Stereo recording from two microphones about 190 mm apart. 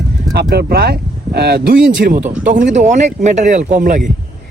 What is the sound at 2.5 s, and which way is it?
Speech, 40° right (ahead or behind).